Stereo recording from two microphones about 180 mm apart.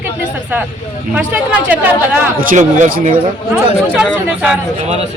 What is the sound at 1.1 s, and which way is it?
Speech, 10° right (ahead or behind).